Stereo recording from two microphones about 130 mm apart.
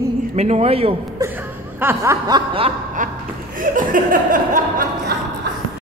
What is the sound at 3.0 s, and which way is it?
Speech, 90° right.